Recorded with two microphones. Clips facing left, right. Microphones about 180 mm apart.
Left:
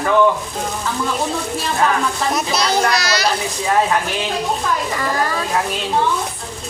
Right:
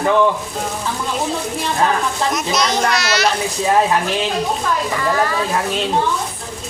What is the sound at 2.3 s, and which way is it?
Speech, 30° left (ahead or behind).